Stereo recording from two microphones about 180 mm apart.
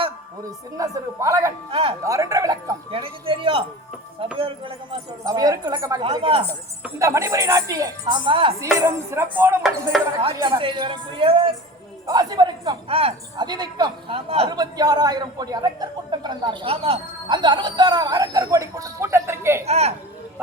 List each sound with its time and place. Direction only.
0.4 s a woman's voice: 20° right (ahead or behind)
1.7 s speech: 30° right (ahead or behind)
2.0 s a woman's voice: 20° right (ahead or behind)
2.9 s a woman's voice: 30° right (ahead or behind)
6.8 s a woman's voice: 15° right (ahead or behind)
8.8 s a woman's voice: 15° right (ahead or behind)
19.6 s speech: 35° right (ahead or behind)